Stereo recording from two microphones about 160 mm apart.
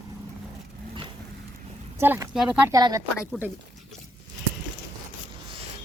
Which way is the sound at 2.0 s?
15° right (ahead or behind).